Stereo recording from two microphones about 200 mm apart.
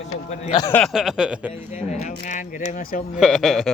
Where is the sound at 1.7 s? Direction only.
35° left (ahead or behind).